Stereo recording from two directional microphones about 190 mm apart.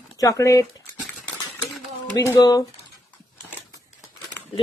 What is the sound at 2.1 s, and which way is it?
Speech, 20° left (ahead or behind).